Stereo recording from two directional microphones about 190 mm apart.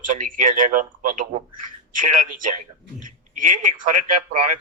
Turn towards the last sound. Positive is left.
turn(degrees=-45)  # may be behind; listen again after turning